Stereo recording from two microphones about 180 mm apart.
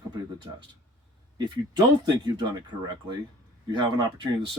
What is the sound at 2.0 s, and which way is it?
Speech, 25° right (ahead or behind).